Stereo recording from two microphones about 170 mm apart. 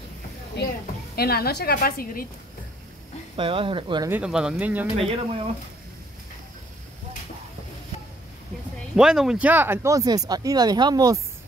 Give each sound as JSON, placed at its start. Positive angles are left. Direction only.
{"t": 1.1, "sound": "a woman's voice", "side_deg": 65}
{"t": 3.3, "sound": "speech", "side_deg": -30}
{"t": 4.1, "sound": "speech", "side_deg": -5}
{"t": 4.9, "sound": "speech", "side_deg": -35}
{"t": 8.9, "sound": "speech", "side_deg": -5}